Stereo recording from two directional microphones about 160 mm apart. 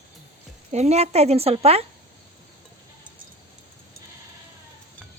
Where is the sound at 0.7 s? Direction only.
40° right (ahead or behind).